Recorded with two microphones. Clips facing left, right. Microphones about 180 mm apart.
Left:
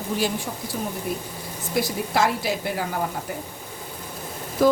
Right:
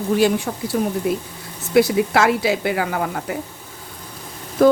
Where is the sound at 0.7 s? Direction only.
80° right.